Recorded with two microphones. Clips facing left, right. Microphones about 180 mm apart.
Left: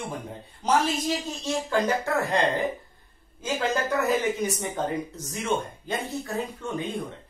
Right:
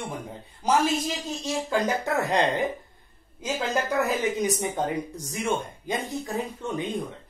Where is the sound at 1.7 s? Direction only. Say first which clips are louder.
Even; 20° right (ahead or behind).